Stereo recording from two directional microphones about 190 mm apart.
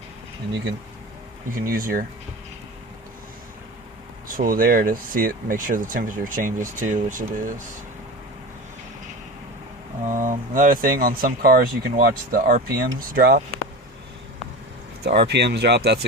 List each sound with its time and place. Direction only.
1.6 s speech: 50° right (ahead or behind)
4.3 s speech: 45° right (ahead or behind)
10.1 s speech: 45° right (ahead or behind)
15.0 s speech: 60° right (ahead or behind)